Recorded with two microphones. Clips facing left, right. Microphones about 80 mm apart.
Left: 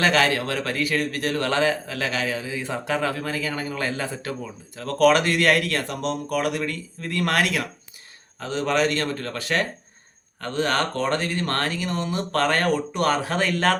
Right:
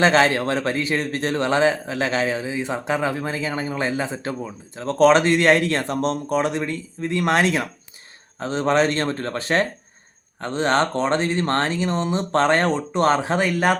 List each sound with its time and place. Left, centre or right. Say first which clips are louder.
0.0 s a man's voice: right 4 dB; right